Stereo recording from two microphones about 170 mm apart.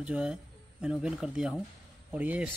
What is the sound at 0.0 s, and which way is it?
Speech, 5° right (ahead or behind).